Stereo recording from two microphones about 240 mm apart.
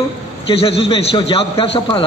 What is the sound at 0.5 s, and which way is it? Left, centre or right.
A man's voice, left.